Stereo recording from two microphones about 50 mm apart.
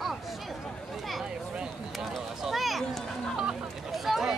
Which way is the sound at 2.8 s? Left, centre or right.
Centre.